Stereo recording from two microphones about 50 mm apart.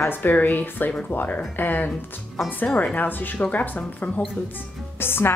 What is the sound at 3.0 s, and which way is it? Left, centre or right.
Speech, left.